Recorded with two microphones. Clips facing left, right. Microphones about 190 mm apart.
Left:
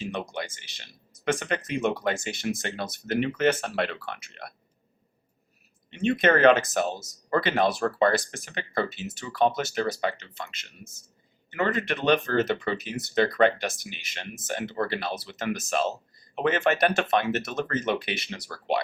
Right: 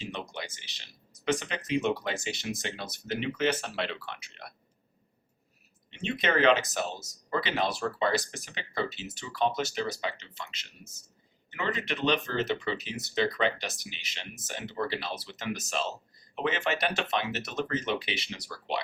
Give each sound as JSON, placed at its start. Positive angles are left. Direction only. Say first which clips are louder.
{"t": 0.0, "sound": "speech", "louder": "left 6 dB", "side_deg": 50}
{"t": 5.9, "sound": "speech", "louder": "left 7 dB", "side_deg": 50}